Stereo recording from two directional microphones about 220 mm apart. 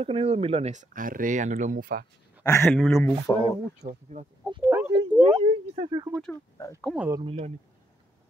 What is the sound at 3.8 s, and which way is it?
Speech, 40° right (ahead or behind).